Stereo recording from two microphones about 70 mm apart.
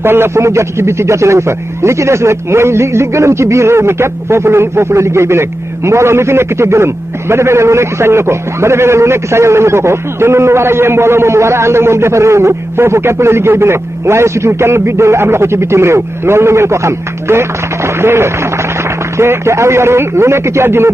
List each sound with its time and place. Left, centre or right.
0.0 s a man's voice: right